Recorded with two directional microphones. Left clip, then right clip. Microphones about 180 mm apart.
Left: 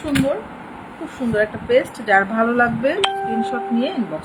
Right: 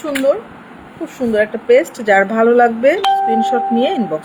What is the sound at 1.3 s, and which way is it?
A woman's voice, 45° right (ahead or behind).